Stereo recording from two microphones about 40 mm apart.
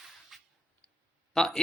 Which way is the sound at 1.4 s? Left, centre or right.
Centre.